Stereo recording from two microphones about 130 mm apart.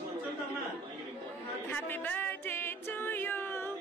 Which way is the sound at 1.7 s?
15° left (ahead or behind).